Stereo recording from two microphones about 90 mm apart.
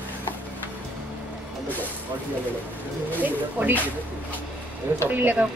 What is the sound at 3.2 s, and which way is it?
Speech, 20° right (ahead or behind).